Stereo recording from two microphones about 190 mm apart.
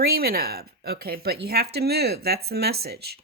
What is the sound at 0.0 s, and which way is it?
Speech, 55° right (ahead or behind).